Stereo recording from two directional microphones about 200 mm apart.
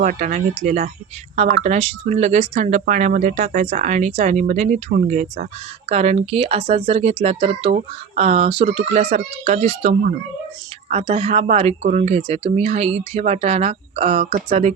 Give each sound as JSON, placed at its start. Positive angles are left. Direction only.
{"t": 0.0, "sound": "speech", "side_deg": -40}
{"t": 5.9, "sound": "speech", "side_deg": -30}